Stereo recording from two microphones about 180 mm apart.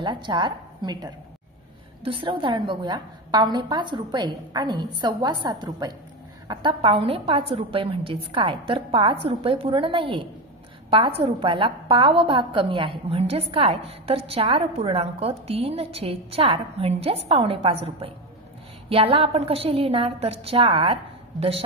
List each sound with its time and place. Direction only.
0.0 s a woman's voice: 25° right (ahead or behind)